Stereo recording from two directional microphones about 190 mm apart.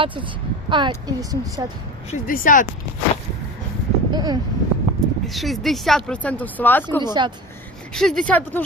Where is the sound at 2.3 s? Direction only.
45° left (ahead or behind).